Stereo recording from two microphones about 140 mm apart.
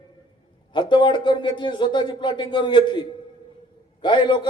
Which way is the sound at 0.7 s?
35° left (ahead or behind).